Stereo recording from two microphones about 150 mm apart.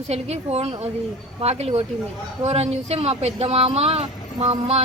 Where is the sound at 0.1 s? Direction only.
45° right (ahead or behind).